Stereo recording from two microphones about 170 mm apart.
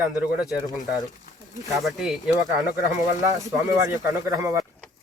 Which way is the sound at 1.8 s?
Centre (ahead or behind).